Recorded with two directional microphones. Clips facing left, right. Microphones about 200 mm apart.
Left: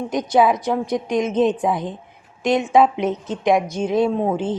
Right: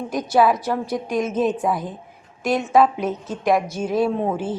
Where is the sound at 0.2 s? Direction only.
20° left (ahead or behind).